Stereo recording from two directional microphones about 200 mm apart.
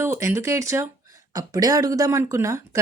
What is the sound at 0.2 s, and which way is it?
A woman's voice, 15° right (ahead or behind).